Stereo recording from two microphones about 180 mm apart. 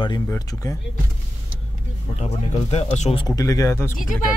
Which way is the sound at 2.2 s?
35° left (ahead or behind).